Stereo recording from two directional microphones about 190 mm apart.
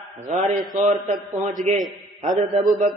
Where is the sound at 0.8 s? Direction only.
45° right (ahead or behind).